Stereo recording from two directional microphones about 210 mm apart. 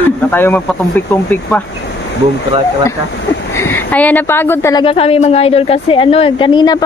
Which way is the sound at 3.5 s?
10° left (ahead or behind).